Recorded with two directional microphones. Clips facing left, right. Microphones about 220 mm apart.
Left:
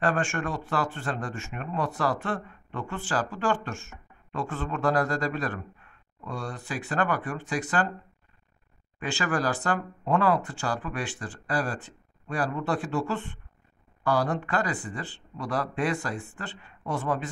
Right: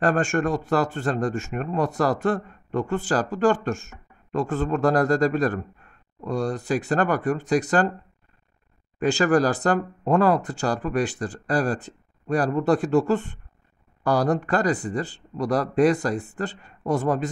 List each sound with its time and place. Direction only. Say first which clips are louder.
0.0 s speech: right 6 dB; 40° right (ahead or behind)
9.0 s speech: right 9 dB; 40° right (ahead or behind)